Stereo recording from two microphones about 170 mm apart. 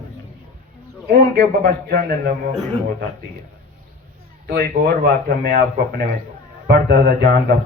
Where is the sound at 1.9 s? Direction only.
60° right (ahead or behind).